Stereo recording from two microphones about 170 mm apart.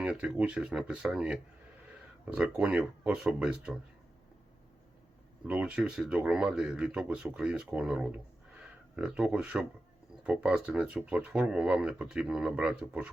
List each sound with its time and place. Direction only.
0.0 s speech: 5° right (ahead or behind)
5.5 s speech: 5° right (ahead or behind)